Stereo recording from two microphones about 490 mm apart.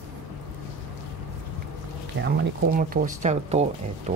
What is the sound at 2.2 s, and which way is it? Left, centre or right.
Speech, right.